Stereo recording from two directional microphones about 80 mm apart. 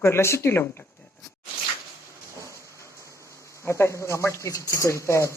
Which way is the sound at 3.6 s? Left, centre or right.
Left.